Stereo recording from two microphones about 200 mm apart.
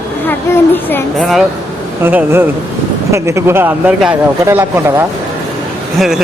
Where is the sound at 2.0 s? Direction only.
10° right (ahead or behind).